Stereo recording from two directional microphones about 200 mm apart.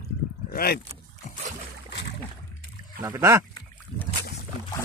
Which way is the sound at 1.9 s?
60° left (ahead or behind).